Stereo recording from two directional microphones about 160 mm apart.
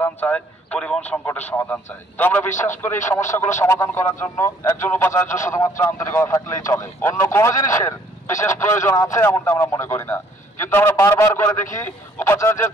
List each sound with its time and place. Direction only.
0.0 s speech: 10° left (ahead or behind)